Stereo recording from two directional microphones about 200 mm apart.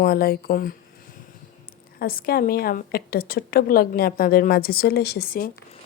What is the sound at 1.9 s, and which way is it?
A woman's voice, 50° left (ahead or behind).